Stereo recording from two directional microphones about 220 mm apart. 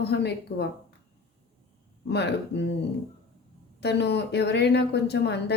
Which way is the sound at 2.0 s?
50° left (ahead or behind).